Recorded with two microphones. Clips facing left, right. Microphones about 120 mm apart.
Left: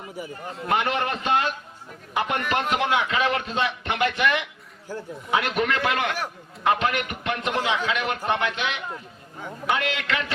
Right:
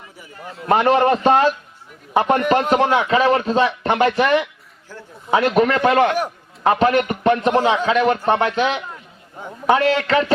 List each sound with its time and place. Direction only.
0.7 s speech: 40° right (ahead or behind)
4.9 s a man's voice: 15° left (ahead or behind)
5.3 s speech: 40° right (ahead or behind)